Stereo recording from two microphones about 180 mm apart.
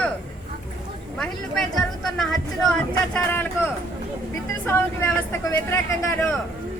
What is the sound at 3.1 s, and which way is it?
Speech, 10° left (ahead or behind).